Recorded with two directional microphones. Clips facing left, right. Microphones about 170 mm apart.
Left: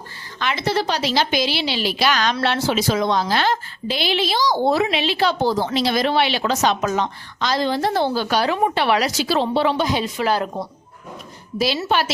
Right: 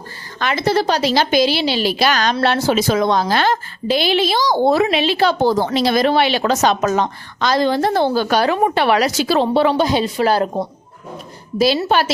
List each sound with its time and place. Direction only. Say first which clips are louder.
0.3 s a woman's voice: right 4 dB; 45° right (ahead or behind)
9.8 s a woman's voice: right 5 dB; 35° right (ahead or behind)